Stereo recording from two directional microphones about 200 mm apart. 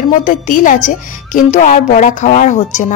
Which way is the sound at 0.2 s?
40° left (ahead or behind).